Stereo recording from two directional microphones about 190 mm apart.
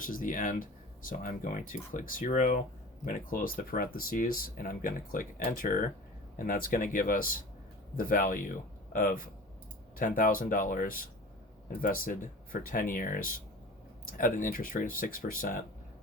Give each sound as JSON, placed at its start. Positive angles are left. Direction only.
{"t": 0.0, "sound": "speech", "side_deg": 45}
{"t": 12.0, "sound": "speech", "side_deg": 50}